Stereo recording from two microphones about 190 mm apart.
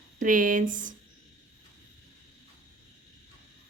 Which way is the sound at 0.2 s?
45° right (ahead or behind).